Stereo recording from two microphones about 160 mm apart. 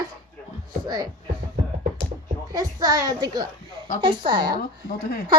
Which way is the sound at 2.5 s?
25° right (ahead or behind).